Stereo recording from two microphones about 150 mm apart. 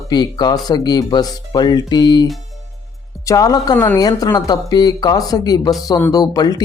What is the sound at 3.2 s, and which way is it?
Speech, 25° left (ahead or behind).